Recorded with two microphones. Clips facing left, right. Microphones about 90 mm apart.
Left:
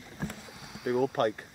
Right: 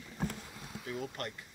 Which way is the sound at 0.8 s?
65° left (ahead or behind).